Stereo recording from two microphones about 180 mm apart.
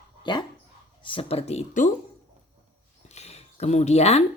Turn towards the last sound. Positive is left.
turn(degrees=35)  # may be behind; listen again after turning